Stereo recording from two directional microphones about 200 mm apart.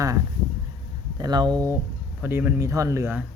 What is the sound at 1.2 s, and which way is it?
Speech, 20° right (ahead or behind).